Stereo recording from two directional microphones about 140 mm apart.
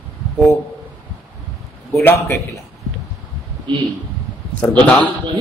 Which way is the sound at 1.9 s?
20° left (ahead or behind).